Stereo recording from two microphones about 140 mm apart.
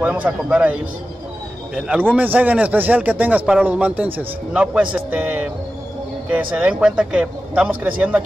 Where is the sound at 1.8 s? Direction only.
10° right (ahead or behind).